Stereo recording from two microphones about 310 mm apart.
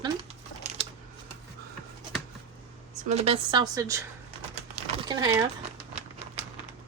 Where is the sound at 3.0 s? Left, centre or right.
Centre.